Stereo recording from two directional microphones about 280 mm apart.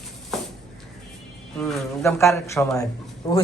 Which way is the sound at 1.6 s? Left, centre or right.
Centre.